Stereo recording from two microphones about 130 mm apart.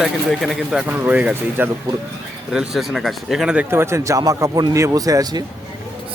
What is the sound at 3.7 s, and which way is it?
Speech, 20° right (ahead or behind).